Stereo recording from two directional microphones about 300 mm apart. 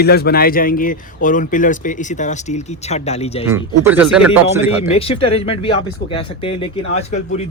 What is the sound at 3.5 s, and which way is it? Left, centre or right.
Speech, centre.